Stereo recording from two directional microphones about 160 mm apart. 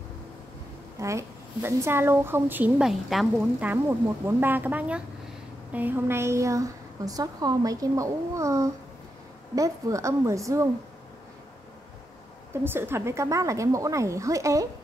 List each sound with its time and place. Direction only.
0.9 s a woman's voice: 20° right (ahead or behind)
12.6 s a woman's voice: 15° right (ahead or behind)